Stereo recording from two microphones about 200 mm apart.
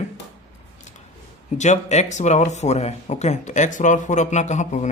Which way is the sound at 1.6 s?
35° left (ahead or behind).